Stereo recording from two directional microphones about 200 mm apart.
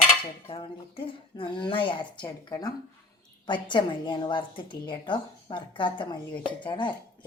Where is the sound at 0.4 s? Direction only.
25° left (ahead or behind).